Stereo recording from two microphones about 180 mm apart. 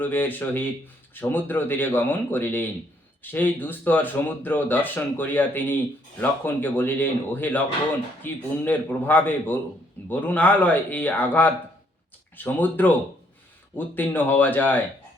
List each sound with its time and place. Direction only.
0.0 s speech: 10° left (ahead or behind)